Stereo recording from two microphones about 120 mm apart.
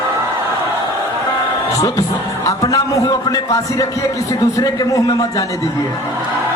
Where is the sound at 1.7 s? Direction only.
25° left (ahead or behind).